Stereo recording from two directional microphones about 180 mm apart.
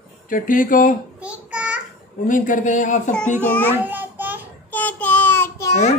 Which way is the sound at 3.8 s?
10° right (ahead or behind).